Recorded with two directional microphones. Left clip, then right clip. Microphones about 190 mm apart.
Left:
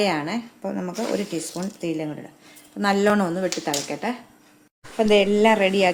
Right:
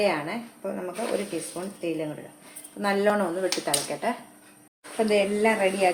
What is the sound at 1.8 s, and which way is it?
Speech, 65° left (ahead or behind).